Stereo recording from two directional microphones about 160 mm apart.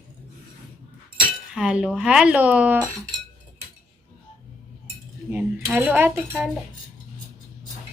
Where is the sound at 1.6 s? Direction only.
5° right (ahead or behind).